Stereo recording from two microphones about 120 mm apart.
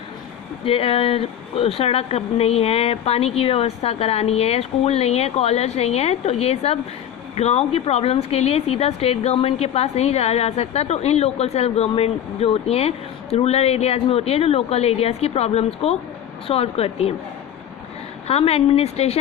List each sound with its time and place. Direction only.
0.6 s speech: 55° left (ahead or behind)
18.3 s speech: 60° left (ahead or behind)